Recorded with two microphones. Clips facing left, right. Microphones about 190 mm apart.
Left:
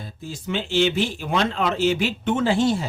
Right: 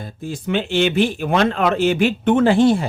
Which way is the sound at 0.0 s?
55° right (ahead or behind).